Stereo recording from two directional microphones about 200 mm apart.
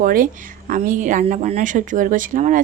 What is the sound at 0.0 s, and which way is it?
A woman's voice, 45° right (ahead or behind).